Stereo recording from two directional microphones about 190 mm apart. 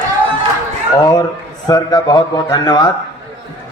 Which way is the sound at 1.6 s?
20° left (ahead or behind).